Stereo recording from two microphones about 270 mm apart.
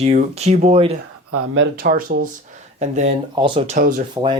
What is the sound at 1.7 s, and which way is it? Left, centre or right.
Speech, right.